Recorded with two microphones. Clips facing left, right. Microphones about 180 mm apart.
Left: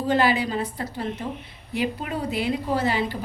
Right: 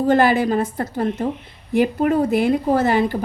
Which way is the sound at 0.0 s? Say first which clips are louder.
Right 6 dB; 50° right (ahead or behind).